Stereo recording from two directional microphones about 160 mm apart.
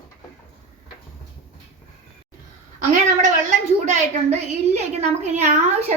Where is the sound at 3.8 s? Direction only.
45° right (ahead or behind).